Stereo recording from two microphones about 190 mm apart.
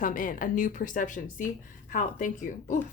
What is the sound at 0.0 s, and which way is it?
A woman's voice, 45° left (ahead or behind).